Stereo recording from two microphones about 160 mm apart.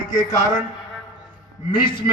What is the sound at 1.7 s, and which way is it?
Speech, 30° left (ahead or behind).